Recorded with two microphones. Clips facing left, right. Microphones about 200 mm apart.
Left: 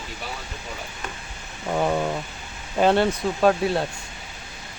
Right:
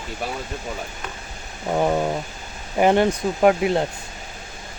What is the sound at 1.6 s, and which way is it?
Speech, 15° right (ahead or behind).